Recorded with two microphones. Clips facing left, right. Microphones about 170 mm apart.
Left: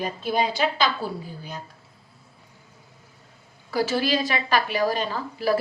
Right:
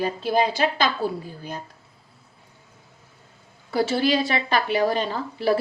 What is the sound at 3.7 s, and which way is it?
A woman's voice, 30° right (ahead or behind).